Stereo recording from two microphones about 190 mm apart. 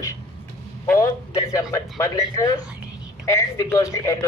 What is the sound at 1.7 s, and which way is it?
A man's voice, 15° left (ahead or behind).